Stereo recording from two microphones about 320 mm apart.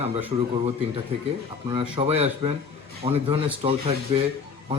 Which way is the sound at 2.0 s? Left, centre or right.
Centre.